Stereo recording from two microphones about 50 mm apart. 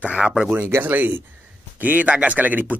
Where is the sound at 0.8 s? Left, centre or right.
Right.